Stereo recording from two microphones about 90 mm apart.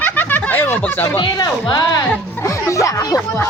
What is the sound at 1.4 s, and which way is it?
Speech, 50° left (ahead or behind).